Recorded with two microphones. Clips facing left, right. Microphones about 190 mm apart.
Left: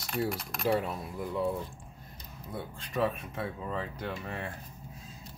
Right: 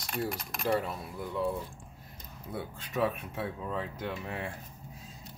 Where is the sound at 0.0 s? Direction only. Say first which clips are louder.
Left 2 dB; centre (ahead or behind).